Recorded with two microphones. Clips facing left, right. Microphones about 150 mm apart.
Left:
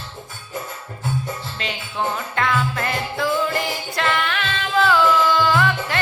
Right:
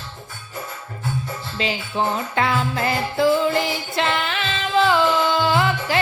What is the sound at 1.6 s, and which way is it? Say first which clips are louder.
Speech: right 3 dB; 30° right (ahead or behind).